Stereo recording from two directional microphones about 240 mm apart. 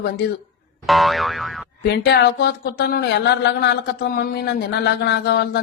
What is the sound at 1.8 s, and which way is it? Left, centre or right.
Speech, left.